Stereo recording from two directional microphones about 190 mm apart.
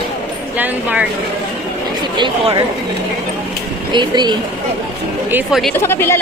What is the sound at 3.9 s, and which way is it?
Speech, 25° right (ahead or behind).